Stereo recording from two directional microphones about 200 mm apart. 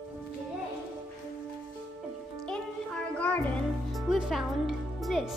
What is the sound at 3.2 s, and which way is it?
Music, 10° left (ahead or behind).